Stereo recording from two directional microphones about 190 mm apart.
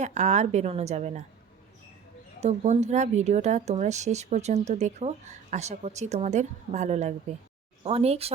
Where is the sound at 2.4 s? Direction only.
35° right (ahead or behind).